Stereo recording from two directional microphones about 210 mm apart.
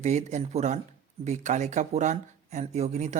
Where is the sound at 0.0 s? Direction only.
35° right (ahead or behind).